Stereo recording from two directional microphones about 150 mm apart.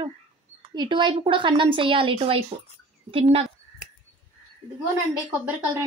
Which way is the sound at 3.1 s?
35° right (ahead or behind).